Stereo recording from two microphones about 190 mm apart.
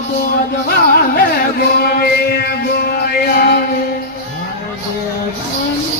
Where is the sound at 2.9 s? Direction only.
55° left (ahead or behind).